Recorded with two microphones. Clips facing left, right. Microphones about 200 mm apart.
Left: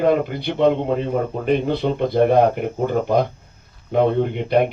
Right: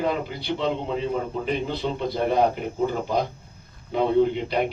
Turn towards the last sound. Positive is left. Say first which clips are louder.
# left 3 dB
turn(degrees=55)  # may be behind; listen again after turning